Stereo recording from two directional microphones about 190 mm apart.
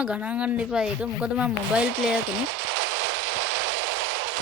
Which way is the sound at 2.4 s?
75° right (ahead or behind).